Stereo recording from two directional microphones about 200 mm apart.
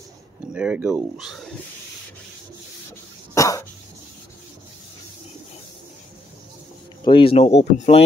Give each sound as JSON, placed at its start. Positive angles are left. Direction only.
{"t": 0.5, "sound": "speech", "side_deg": -5}
{"t": 3.3, "sound": "cough", "side_deg": 15}
{"t": 7.1, "sound": "speech", "side_deg": 25}